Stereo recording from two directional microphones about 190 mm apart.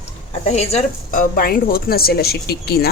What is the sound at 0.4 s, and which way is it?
A woman's voice, 35° left (ahead or behind).